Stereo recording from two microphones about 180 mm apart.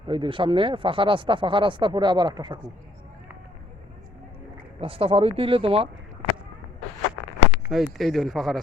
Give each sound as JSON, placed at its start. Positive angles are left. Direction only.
{"t": 0.1, "sound": "speech", "side_deg": -30}
{"t": 4.8, "sound": "speech", "side_deg": -30}
{"t": 7.7, "sound": "speech", "side_deg": 0}